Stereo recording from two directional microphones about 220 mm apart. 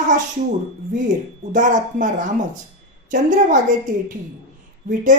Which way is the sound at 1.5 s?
35° right (ahead or behind).